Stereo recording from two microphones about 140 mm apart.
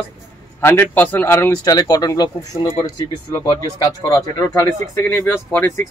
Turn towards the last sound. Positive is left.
turn(degrees=15)  # may be behind; listen again after turning